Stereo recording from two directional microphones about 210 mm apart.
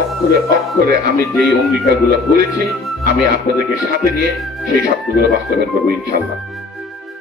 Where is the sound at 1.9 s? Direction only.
45° right (ahead or behind).